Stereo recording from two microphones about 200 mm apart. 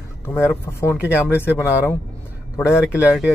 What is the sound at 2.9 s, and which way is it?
Speech, 5° right (ahead or behind).